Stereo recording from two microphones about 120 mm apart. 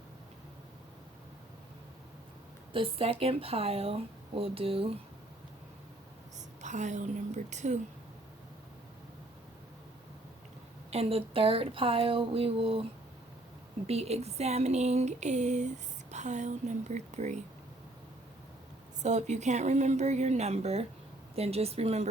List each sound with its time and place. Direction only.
2.7 s speech: 50° right (ahead or behind)
6.6 s a woman's voice: 85° right
10.9 s speech: 55° right (ahead or behind)
13.8 s a sound: 60° right (ahead or behind)
19.0 s a sound: 75° right (ahead or behind)
21.3 s a woman's voice: 60° right (ahead or behind)